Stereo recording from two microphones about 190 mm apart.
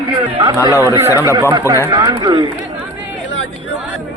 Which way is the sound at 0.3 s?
25° right (ahead or behind).